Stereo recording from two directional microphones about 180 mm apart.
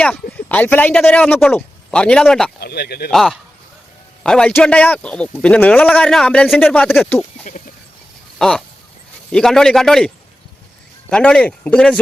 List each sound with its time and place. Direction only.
0.0 s speech: 5° left (ahead or behind)
2.6 s speech: 60° left (ahead or behind)
3.1 s speech: centre (ahead or behind)
7.5 s a sound: 50° left (ahead or behind)
8.4 s speech: 5° left (ahead or behind)
11.1 s speech: 5° left (ahead or behind)